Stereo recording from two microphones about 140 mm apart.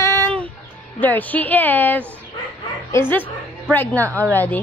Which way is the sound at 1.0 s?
10° left (ahead or behind).